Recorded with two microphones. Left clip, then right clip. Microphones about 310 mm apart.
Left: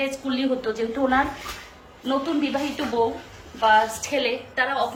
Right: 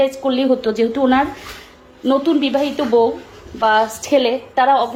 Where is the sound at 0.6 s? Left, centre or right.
Right.